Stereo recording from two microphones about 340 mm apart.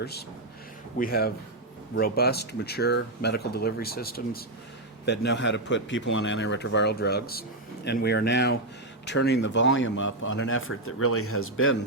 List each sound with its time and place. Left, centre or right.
0.0 s speech: left